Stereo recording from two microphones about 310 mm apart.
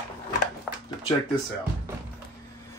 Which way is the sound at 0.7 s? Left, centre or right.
Centre.